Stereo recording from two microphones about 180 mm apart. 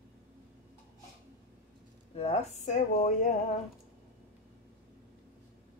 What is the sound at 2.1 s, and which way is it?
Speech, 35° left (ahead or behind).